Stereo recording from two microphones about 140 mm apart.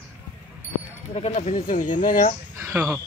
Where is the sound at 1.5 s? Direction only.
85° left.